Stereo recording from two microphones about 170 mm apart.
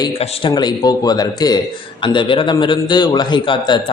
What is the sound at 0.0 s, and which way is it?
A man's voice, 30° left (ahead or behind).